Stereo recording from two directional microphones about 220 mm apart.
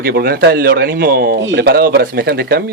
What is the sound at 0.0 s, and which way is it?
Speech, 45° right (ahead or behind).